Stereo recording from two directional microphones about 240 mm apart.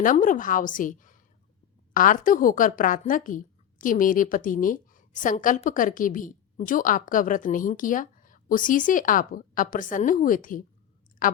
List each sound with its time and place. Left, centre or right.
0.0 s a woman's voice: left